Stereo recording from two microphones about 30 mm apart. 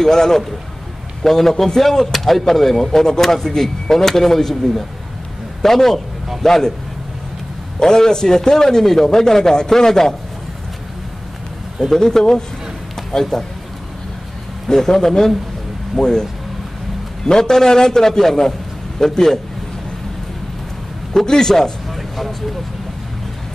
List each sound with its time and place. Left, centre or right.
0.0 s a man's voice: centre
7.8 s a man's voice: centre
11.9 s a man's voice: centre
12.9 s a sound: centre
14.7 s a man's voice: left
17.3 s a man's voice: centre
21.3 s a man's voice: centre
21.9 s a sound: centre